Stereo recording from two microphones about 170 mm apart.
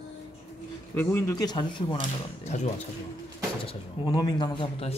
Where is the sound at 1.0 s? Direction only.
15° left (ahead or behind).